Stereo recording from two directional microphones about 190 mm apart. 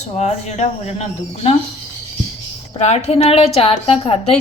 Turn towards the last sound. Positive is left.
turn(degrees=30)  # may be behind; listen again after turning